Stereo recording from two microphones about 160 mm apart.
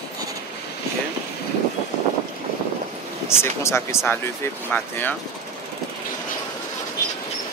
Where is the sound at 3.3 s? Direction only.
15° left (ahead or behind).